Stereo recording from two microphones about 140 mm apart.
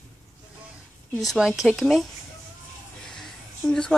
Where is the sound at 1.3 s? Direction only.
Centre (ahead or behind).